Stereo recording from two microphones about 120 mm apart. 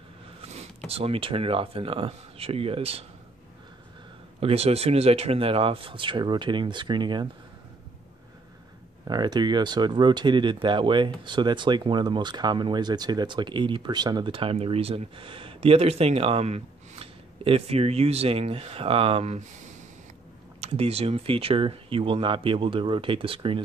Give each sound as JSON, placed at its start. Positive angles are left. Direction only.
{"t": 0.4, "sound": "a sound", "side_deg": -60}
{"t": 0.8, "sound": "speech", "side_deg": -55}
{"t": 4.4, "sound": "speech", "side_deg": -55}
{"t": 9.0, "sound": "speech", "side_deg": -35}
{"t": 20.6, "sound": "speech", "side_deg": -55}